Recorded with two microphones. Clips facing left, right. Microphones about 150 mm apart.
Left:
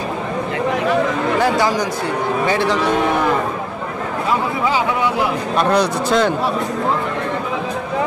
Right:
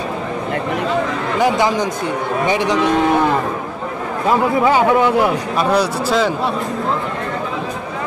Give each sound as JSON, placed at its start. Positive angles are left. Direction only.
{"t": 1.4, "sound": "speech", "side_deg": -20}
{"t": 5.6, "sound": "speech", "side_deg": -5}